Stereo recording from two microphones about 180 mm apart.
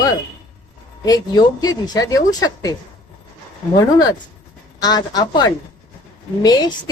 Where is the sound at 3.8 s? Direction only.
20° left (ahead or behind).